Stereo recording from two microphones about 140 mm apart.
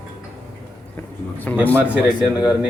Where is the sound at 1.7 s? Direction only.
15° right (ahead or behind).